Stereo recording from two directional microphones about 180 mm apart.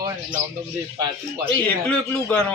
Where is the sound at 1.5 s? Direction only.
5° left (ahead or behind).